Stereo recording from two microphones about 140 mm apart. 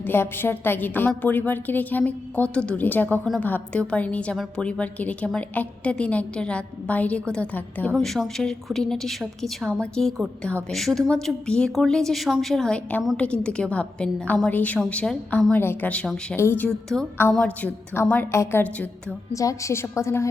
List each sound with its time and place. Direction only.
0.0 s a woman's voice: 15° left (ahead or behind)
7.9 s a woman's voice: centre (ahead or behind)
19.3 s a woman's voice: 25° left (ahead or behind)